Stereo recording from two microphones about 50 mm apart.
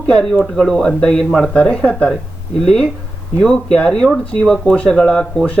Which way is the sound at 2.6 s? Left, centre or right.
Centre.